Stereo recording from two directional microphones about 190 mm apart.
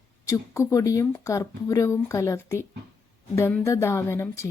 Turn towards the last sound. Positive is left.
turn(degrees=15)  # may be behind; listen again after turning